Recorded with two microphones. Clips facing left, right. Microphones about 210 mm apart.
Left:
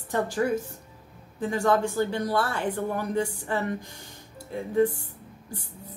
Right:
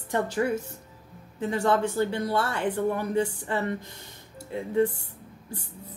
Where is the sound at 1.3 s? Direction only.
25° right (ahead or behind).